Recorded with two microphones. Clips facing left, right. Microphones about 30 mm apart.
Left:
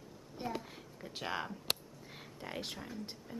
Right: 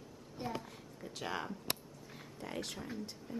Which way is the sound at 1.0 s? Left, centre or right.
Centre.